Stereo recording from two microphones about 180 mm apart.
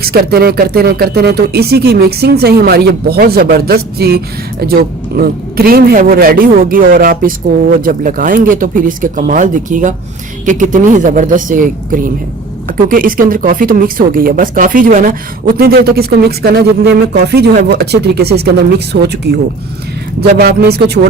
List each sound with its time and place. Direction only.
0.0 s speech: 60° right (ahead or behind)
20.4 s speech: 65° right (ahead or behind)